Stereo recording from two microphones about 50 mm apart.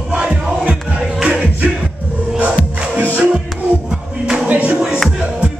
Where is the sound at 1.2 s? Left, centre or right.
Centre.